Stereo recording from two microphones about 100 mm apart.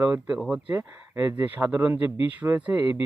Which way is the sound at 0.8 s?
25° right (ahead or behind).